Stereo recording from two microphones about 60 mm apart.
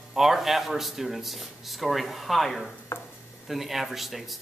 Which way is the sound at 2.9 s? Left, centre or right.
Left.